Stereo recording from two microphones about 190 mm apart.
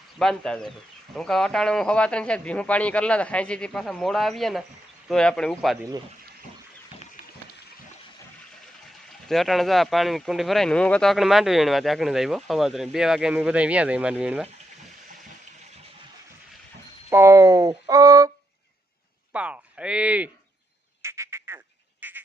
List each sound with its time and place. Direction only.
0.2 s speech: 5° left (ahead or behind)
9.3 s speech: centre (ahead or behind)
17.1 s speech: 15° right (ahead or behind)
19.3 s a sound: 5° right (ahead or behind)
21.0 s frog: 15° right (ahead or behind)
22.0 s a sound: 10° right (ahead or behind)